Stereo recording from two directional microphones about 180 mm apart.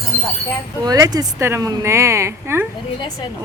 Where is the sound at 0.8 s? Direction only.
20° right (ahead or behind).